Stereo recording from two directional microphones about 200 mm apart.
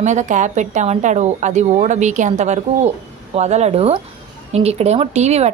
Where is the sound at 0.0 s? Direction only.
35° right (ahead or behind).